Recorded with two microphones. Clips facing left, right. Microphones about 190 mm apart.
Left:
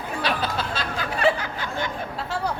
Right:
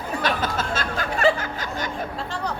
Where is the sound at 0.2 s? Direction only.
45° right (ahead or behind).